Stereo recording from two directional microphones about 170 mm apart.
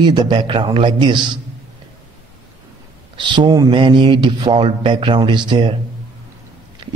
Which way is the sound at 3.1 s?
25° right (ahead or behind).